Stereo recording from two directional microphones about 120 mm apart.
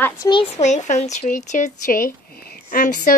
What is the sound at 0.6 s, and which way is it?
Speech, 80° left.